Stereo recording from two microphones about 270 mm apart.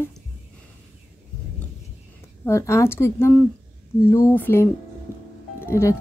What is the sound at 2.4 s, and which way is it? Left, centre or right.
A woman's voice, centre.